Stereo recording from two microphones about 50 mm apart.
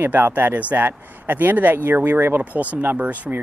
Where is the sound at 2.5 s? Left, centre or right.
Right.